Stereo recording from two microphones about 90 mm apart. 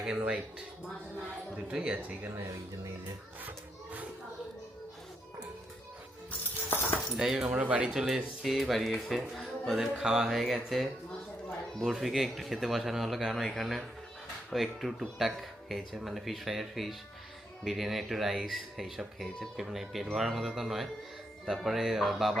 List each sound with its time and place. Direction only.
1.5 s speech: 10° right (ahead or behind)
6.7 s a sound: 25° left (ahead or behind)
7.2 s speech: 5° right (ahead or behind)